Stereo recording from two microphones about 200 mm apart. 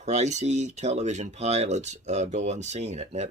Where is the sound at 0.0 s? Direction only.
35° right (ahead or behind).